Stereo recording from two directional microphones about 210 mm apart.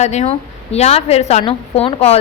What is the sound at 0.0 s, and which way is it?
A woman's voice, 30° left (ahead or behind).